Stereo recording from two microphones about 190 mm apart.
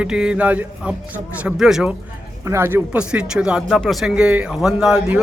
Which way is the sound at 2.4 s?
10° right (ahead or behind).